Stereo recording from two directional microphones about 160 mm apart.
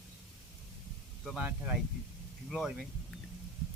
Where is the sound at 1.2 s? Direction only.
5° right (ahead or behind).